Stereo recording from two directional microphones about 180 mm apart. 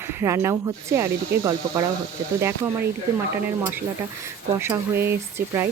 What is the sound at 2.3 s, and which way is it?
Speech, 15° right (ahead or behind).